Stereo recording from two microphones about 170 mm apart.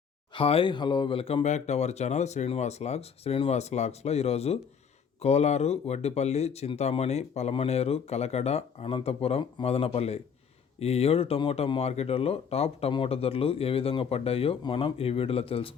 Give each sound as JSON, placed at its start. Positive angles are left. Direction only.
{"t": 0.3, "sound": "speech", "side_deg": 30}